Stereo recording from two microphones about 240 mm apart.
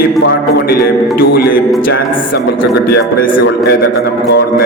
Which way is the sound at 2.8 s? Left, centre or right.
Left.